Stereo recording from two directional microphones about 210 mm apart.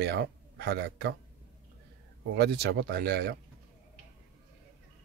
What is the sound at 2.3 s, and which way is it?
Speech, 50° right (ahead or behind).